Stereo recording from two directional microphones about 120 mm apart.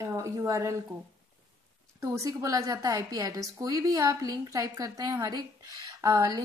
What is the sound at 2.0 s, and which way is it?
A woman's voice, 25° right (ahead or behind).